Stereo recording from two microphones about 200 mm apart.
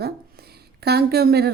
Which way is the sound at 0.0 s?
50° right (ahead or behind).